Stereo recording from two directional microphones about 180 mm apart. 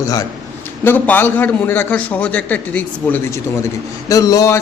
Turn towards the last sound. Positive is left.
turn(degrees=20)  # may be behind; listen again after turning